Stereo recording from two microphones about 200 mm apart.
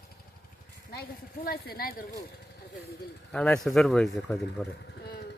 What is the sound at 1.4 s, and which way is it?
Speech, 50° left (ahead or behind).